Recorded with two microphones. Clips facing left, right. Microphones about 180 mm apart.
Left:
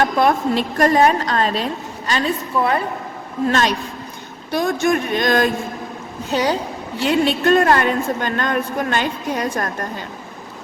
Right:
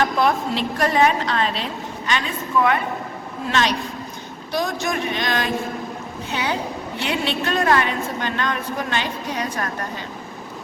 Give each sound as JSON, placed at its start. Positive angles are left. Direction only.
{"t": 0.0, "sound": "a woman's voice", "side_deg": 50}
{"t": 4.5, "sound": "a woman's voice", "side_deg": 50}